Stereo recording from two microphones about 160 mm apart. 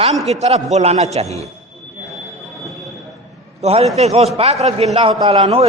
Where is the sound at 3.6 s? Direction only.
40° right (ahead or behind).